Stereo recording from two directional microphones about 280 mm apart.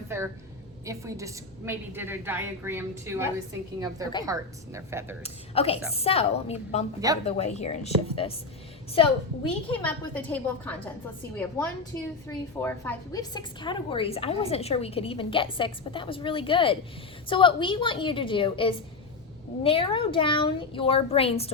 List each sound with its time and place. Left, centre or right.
0.9 s a woman's voice: centre
5.2 s a woman's voice: left
9.7 s a woman's voice: centre